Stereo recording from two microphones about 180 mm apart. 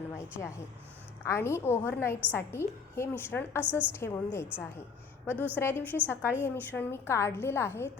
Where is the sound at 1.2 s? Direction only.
15° left (ahead or behind).